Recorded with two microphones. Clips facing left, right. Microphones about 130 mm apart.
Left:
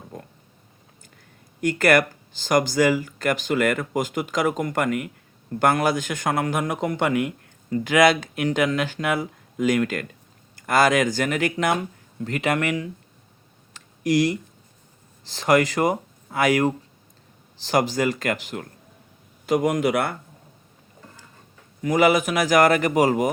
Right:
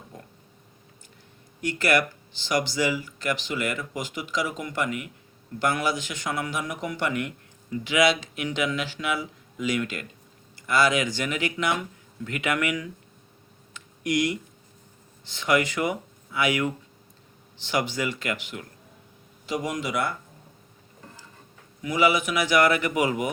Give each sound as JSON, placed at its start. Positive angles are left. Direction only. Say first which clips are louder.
{"t": 1.6, "sound": "speech", "louder": "left 5 dB", "side_deg": 50}
{"t": 7.7, "sound": "a man's voice", "louder": "left 5 dB", "side_deg": 50}
{"t": 13.7, "sound": "clicking", "louder": "left 5 dB", "side_deg": 35}
{"t": 15.3, "sound": "a man's voice", "louder": "left 5 dB", "side_deg": 40}
{"t": 19.5, "sound": "a man's voice", "louder": "left 9 dB", "side_deg": 55}
{"t": 21.8, "sound": "a man's voice", "louder": "left 4 dB", "side_deg": 45}